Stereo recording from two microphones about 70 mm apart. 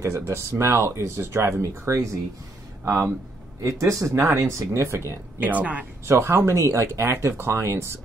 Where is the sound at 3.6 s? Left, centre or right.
Right.